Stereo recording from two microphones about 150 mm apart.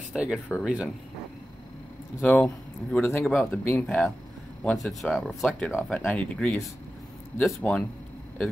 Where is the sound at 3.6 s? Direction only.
15° left (ahead or behind).